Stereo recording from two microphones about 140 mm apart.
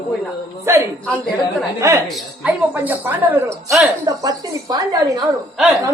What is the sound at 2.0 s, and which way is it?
Speech, centre (ahead or behind).